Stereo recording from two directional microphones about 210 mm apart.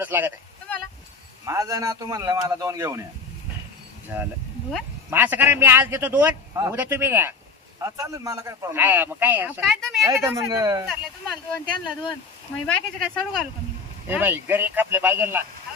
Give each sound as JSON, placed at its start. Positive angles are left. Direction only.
{"t": 0.0, "sound": "a man's voice", "side_deg": -10}
{"t": 1.4, "sound": "a man's voice", "side_deg": -15}
{"t": 4.1, "sound": "a man's voice", "side_deg": -10}
{"t": 9.6, "sound": "speech", "side_deg": 0}
{"t": 10.0, "sound": "a man's voice", "side_deg": -15}
{"t": 11.7, "sound": "speech", "side_deg": 20}
{"t": 12.6, "sound": "speech", "side_deg": 0}
{"t": 14.0, "sound": "a man's voice", "side_deg": -10}